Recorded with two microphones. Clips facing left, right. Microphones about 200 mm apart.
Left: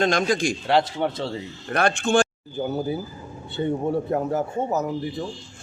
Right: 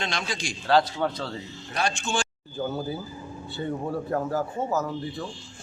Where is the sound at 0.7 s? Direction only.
20° left (ahead or behind).